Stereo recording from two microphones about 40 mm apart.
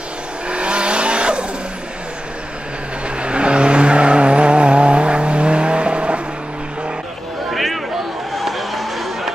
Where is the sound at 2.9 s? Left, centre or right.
Right.